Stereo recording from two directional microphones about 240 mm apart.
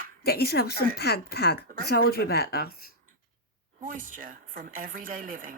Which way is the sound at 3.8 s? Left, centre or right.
Right.